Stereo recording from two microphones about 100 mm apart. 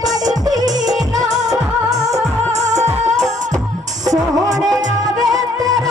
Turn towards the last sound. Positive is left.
turn(degrees=-35)  # may be behind; listen again after turning